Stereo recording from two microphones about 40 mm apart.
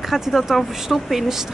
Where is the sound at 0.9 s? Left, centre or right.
Centre.